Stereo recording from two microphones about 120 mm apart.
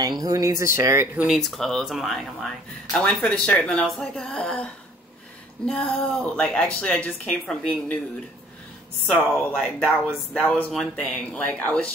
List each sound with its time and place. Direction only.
0.2 s speech: 30° right (ahead or behind)
1.1 s speech: 5° right (ahead or behind)
5.7 s a woman's voice: 10° left (ahead or behind)
9.0 s a woman's voice: 10° left (ahead or behind)